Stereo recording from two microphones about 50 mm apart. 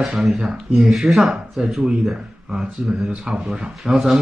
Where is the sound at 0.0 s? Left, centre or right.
Centre.